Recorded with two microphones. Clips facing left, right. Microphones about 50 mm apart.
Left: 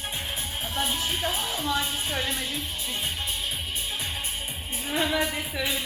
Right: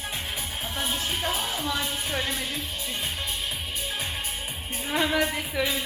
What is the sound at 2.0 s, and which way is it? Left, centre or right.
Music, centre.